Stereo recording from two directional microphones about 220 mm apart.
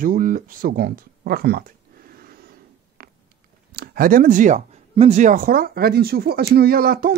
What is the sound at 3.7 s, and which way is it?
Speech, 40° right (ahead or behind).